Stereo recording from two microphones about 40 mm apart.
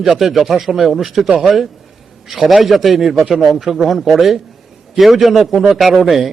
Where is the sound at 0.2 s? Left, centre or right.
Centre.